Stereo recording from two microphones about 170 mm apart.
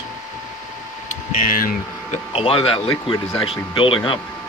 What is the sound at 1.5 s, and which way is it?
Speech, 55° left (ahead or behind).